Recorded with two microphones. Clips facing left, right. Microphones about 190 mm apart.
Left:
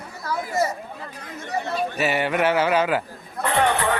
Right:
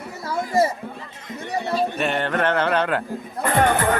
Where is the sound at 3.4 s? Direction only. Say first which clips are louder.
Right 2 dB; 45° right (ahead or behind).